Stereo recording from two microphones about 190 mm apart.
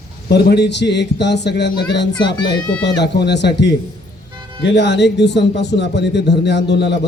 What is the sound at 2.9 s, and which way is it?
Speech, 60° left (ahead or behind).